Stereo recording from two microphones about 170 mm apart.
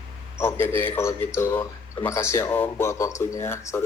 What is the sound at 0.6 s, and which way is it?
A woman's voice, 10° left (ahead or behind).